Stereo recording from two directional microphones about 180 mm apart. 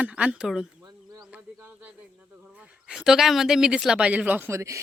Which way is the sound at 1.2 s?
10° right (ahead or behind).